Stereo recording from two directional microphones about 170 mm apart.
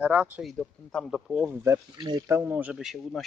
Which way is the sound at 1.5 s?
15° right (ahead or behind).